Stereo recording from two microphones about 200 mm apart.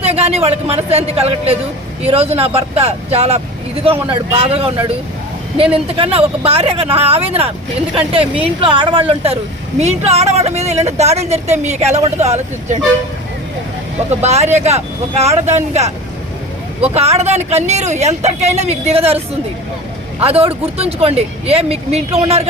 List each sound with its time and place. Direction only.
0.0 s a woman's voice: 30° right (ahead or behind)
14.1 s a woman's voice: 35° right (ahead or behind)
16.9 s a woman's voice: 30° right (ahead or behind)
20.2 s a woman's voice: 30° right (ahead or behind)